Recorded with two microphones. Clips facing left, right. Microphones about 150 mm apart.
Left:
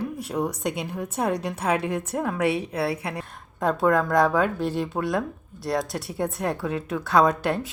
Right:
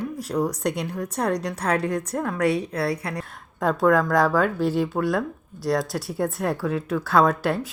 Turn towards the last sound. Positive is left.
turn(degrees=0)  # may be behind; listen again after turning